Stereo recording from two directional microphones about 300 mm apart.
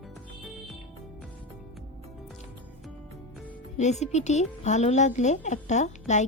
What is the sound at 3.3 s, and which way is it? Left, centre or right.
Music, centre.